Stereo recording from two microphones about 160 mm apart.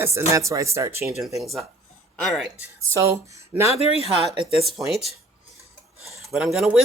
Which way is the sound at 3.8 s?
40° left (ahead or behind).